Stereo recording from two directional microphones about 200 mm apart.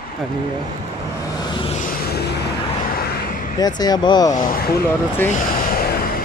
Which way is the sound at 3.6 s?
20° left (ahead or behind).